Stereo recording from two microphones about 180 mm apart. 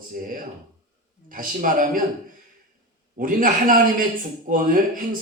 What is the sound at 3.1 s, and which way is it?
A man's voice, 50° right (ahead or behind).